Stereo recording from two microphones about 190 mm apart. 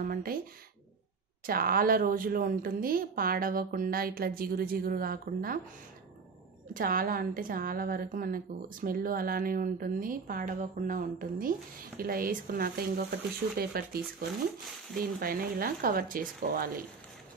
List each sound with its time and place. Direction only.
0.0 s a sound: 50° right (ahead or behind)
1.4 s a woman's voice: 50° right (ahead or behind)
6.7 s a woman's voice: 45° right (ahead or behind)